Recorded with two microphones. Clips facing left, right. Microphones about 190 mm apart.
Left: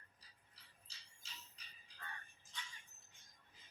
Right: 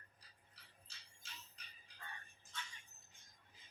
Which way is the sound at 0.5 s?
55° right (ahead or behind).